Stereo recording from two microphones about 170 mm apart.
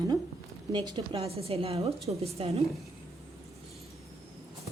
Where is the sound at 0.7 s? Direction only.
30° right (ahead or behind).